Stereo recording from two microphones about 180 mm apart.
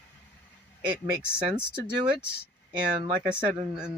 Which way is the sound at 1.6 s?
25° right (ahead or behind).